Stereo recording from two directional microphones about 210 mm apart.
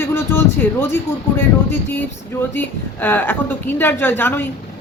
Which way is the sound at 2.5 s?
10° left (ahead or behind).